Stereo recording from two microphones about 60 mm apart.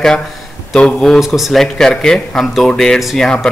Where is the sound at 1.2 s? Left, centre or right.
Centre.